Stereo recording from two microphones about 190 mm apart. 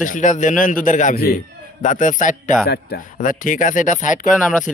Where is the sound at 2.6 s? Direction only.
55° left (ahead or behind).